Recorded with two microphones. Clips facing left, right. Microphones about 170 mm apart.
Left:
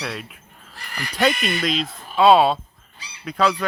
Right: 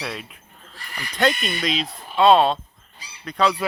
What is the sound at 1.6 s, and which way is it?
Speech, centre (ahead or behind).